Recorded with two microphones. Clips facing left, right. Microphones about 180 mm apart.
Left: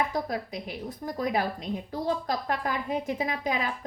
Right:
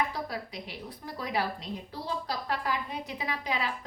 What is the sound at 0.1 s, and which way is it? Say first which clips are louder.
A woman's voice: left 5 dB; 45° left (ahead or behind).